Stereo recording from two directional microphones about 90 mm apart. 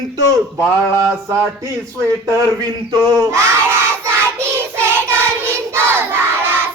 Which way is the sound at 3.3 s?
25° right (ahead or behind).